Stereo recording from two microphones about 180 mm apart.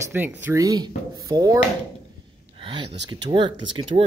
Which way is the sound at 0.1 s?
10° right (ahead or behind).